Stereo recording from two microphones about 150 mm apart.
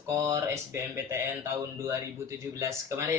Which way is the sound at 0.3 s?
15° right (ahead or behind).